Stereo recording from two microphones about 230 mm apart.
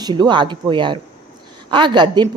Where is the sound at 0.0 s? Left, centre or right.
Centre.